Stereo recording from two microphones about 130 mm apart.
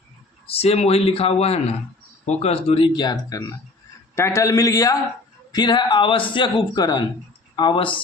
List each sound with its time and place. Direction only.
0.4 s a man's voice: 50° left (ahead or behind)